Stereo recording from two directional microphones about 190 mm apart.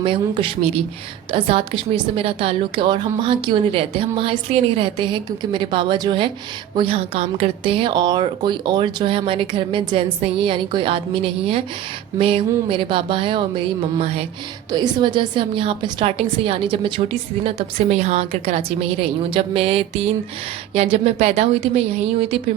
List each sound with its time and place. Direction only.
0.0 s a woman's voice: 25° right (ahead or behind)